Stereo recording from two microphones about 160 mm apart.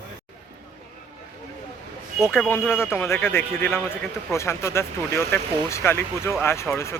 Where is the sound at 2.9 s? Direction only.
15° left (ahead or behind).